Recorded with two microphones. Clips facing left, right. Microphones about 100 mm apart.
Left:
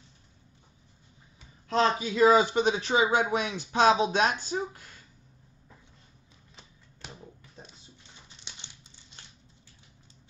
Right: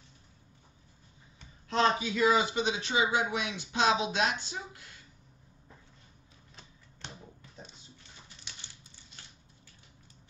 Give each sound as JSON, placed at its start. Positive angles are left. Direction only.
{"t": 1.7, "sound": "speech", "side_deg": 35}
{"t": 8.5, "sound": "crumpling", "side_deg": 20}